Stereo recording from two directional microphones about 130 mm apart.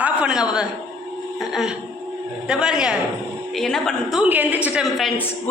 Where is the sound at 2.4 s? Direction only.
5° right (ahead or behind).